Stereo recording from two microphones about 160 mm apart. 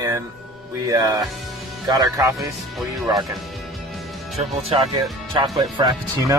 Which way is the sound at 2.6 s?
Centre (ahead or behind).